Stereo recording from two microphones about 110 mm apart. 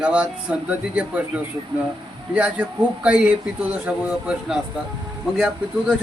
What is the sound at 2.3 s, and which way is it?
Speech, 10° right (ahead or behind).